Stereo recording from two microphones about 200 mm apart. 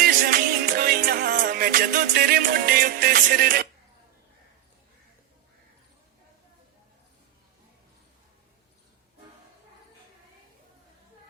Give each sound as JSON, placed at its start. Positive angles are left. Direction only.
{"t": 0.0, "sound": "music", "side_deg": -45}